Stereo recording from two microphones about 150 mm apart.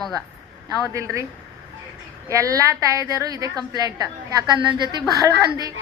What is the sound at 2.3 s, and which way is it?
A woman's voice, 20° right (ahead or behind).